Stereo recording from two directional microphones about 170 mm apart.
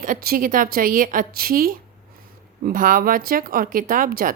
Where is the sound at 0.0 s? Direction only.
55° right (ahead or behind).